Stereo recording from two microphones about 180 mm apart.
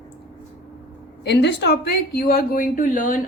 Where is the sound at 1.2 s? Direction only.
70° left (ahead or behind).